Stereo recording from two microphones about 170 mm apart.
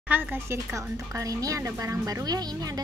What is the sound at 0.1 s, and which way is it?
A woman's voice, 10° right (ahead or behind).